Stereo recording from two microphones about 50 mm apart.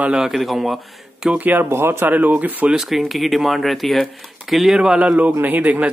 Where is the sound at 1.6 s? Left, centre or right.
Right.